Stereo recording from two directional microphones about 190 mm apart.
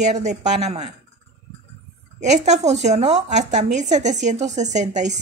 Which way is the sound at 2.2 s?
35° right (ahead or behind).